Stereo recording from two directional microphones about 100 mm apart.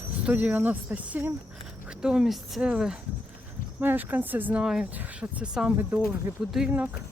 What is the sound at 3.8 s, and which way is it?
Speech, 20° right (ahead or behind).